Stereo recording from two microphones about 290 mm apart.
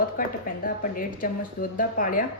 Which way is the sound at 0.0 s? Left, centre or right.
Left.